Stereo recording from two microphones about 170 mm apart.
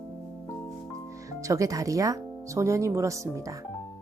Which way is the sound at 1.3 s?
20° right (ahead or behind).